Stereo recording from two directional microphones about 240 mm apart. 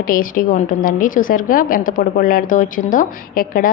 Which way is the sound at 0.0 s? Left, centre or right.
Left.